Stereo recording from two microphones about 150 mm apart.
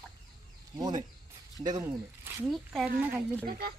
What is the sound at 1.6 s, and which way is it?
Speech, 25° right (ahead or behind).